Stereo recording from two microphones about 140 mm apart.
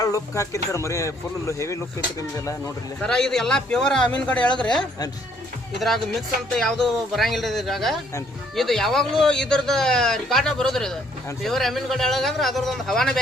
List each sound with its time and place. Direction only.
0.0 s speech: 25° left (ahead or behind)
3.0 s speech: 5° left (ahead or behind)
5.8 s speech: centre (ahead or behind)